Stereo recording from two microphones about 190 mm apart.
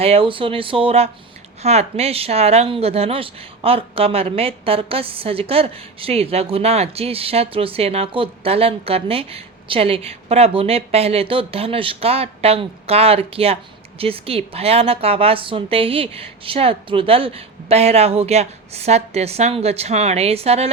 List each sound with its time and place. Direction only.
0.0 s speech: 30° right (ahead or behind)